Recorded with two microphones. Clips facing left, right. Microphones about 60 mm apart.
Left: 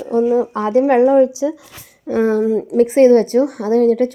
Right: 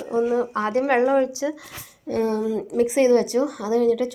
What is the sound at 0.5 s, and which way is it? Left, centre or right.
Speech, right.